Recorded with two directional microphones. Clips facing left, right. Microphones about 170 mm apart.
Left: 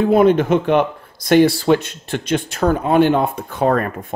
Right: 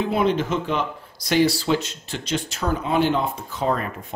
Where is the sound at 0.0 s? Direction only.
50° left (ahead or behind).